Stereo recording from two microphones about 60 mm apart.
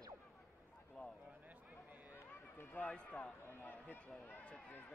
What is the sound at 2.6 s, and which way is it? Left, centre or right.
Run, left.